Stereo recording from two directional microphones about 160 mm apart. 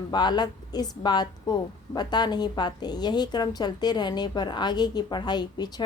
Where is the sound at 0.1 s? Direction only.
25° left (ahead or behind).